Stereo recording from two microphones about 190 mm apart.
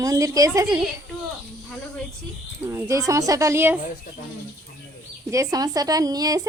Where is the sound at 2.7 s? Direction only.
15° right (ahead or behind).